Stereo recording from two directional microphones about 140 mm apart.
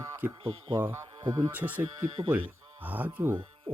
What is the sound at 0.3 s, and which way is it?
Speech, 40° right (ahead or behind).